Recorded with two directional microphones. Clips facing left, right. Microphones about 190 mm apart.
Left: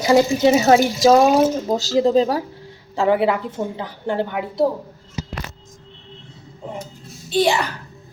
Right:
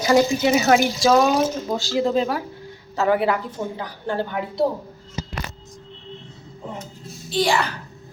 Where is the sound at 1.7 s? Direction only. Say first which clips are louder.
Left 4 dB; 40° left (ahead or behind); by 4.4 s 20° left (ahead or behind).